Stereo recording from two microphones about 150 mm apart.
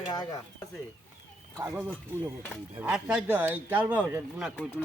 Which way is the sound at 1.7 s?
10° right (ahead or behind).